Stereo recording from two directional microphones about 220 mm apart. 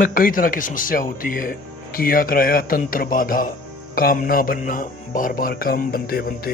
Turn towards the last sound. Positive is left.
turn(degrees=40)  # may be behind; listen again after turning